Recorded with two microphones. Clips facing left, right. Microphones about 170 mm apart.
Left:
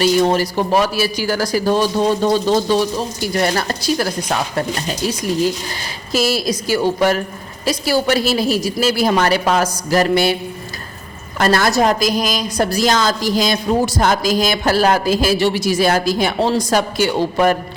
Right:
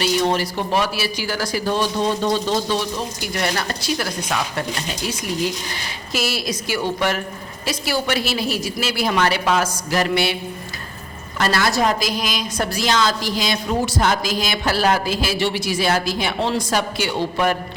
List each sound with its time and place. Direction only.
0.0 s speech: 40° left (ahead or behind)
6.1 s speech: 40° left (ahead or behind)
11.3 s a woman's voice: 45° left (ahead or behind)